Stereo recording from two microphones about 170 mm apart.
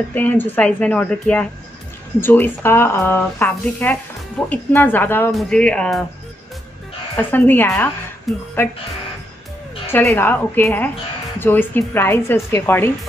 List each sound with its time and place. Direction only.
0.1 s speech: 10° left (ahead or behind)
7.2 s speech: 10° left (ahead or behind)
8.3 s speech: centre (ahead or behind)
9.8 s speech: 15° left (ahead or behind)